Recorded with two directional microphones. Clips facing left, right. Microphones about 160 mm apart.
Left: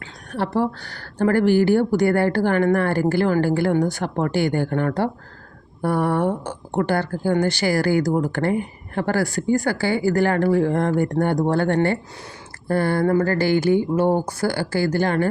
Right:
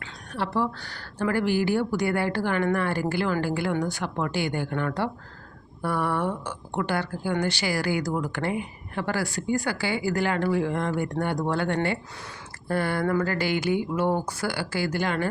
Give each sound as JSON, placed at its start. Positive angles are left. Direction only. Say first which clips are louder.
{"t": 0.3, "sound": "speech", "louder": "left 5 dB", "side_deg": 45}